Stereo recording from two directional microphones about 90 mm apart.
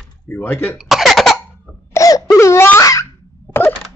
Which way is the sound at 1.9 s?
40° left (ahead or behind).